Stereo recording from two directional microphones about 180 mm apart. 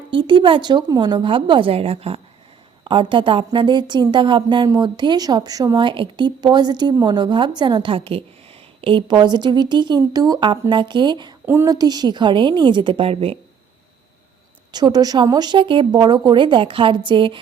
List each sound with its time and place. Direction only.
0.2 s a woman's voice: 25° right (ahead or behind)
14.7 s a woman's voice: 25° right (ahead or behind)